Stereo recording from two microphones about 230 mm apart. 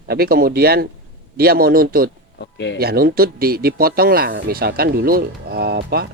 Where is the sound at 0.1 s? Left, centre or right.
Right.